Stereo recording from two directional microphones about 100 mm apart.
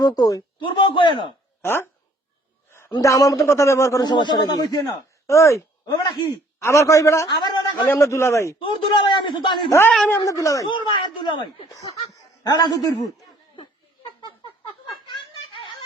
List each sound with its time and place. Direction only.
0.0 s a man's voice: 40° left (ahead or behind)
0.6 s a man's voice: 55° left (ahead or behind)
1.6 s a man's voice: 25° left (ahead or behind)
2.9 s a man's voice: 35° left (ahead or behind)
4.0 s speech: 45° left (ahead or behind)
4.9 s a man's voice: 30° left (ahead or behind)
7.3 s a sound: 50° left (ahead or behind)
7.9 s a man's voice: 30° left (ahead or behind)
8.5 s a man's voice: 60° left (ahead or behind)
9.6 s a man's voice: 25° left (ahead or behind)
10.7 s speech: 55° left (ahead or behind)
11.8 s speech: 40° left (ahead or behind)
15.0 s a sound: 55° left (ahead or behind)